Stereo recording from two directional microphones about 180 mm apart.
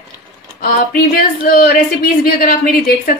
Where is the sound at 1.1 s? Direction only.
50° left (ahead or behind).